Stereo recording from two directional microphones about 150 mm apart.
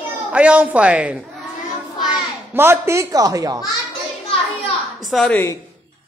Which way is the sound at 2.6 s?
15° right (ahead or behind).